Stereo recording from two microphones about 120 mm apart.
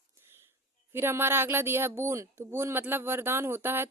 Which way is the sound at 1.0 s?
20° right (ahead or behind).